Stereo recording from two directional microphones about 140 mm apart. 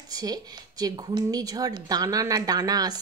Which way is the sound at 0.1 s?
25° right (ahead or behind).